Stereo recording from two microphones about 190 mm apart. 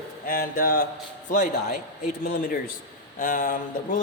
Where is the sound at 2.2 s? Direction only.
45° left (ahead or behind).